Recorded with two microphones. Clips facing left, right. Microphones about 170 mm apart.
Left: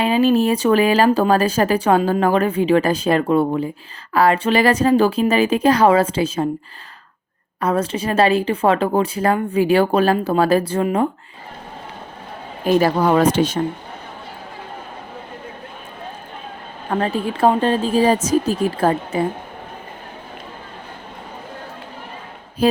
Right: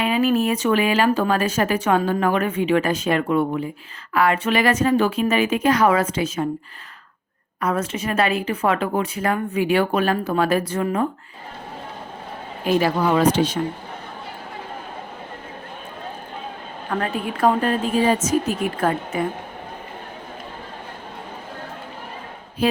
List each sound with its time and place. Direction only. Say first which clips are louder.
0.0 s a woman's voice: left 4 dB; 30° left (ahead or behind)
7.6 s a woman's voice: left 4 dB; 30° left (ahead or behind)
12.6 s speech: left 4 dB; 45° left (ahead or behind)
16.9 s a woman's voice: left 4 dB; 30° left (ahead or behind)
22.6 s a woman's voice: left 4 dB; 40° left (ahead or behind)